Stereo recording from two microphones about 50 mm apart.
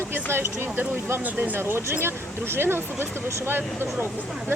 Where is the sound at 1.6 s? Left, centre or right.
Right.